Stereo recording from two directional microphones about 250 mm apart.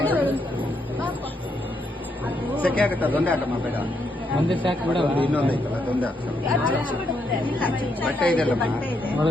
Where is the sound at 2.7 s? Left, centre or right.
Centre.